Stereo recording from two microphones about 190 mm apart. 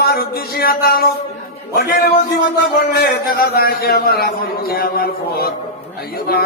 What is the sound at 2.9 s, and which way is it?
Speech, 55° left (ahead or behind).